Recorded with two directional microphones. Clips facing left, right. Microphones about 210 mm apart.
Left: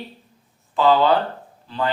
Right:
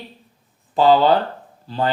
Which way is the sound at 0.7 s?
40° right (ahead or behind).